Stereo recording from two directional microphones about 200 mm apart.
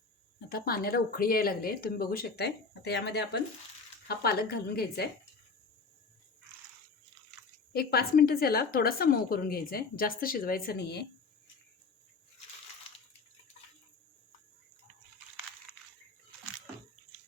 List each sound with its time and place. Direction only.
0.4 s a woman's voice: 50° left (ahead or behind)
7.7 s a woman's voice: 50° left (ahead or behind)